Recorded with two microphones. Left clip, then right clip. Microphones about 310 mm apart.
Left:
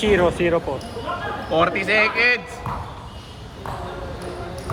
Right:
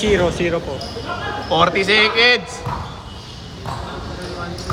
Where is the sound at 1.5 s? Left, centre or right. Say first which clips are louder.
Right 4 dB; centre.